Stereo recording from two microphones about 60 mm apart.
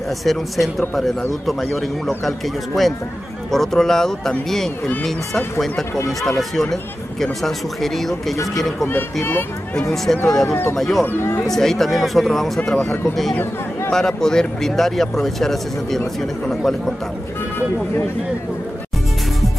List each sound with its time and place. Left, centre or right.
0.2 s speech: centre
8.8 s speech: left
9.8 s speech: centre
10.5 s speech: left
10.8 s speech: centre
11.1 s speech: left
11.4 s speech: centre